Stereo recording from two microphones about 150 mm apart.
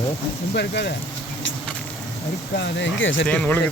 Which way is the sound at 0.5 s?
90° left.